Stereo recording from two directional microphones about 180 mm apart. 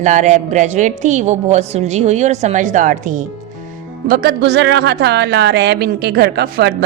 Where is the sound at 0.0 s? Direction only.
40° right (ahead or behind).